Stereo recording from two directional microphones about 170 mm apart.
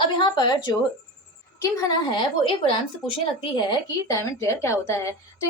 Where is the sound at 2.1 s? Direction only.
30° left (ahead or behind).